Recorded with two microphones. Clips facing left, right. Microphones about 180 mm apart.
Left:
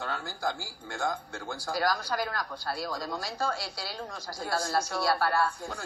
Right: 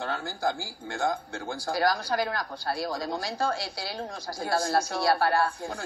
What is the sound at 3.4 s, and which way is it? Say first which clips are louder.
Speech: right 3 dB; 55° right (ahead or behind).